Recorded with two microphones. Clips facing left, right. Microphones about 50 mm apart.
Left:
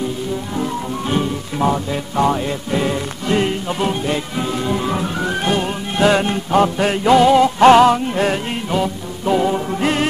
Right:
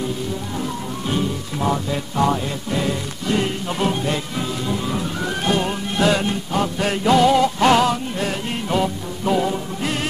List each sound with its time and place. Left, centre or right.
0.6 s music: left
1.7 s music: centre
3.6 s music: centre
4.6 s music: left
5.2 s music: left
6.2 s music: left
6.8 s music: left
8.6 s music: centre
9.8 s music: left